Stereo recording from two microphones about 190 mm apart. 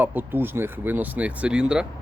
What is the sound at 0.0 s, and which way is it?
Speech, 10° right (ahead or behind).